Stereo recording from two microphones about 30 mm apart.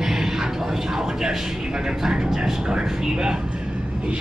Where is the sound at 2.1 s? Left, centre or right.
Right.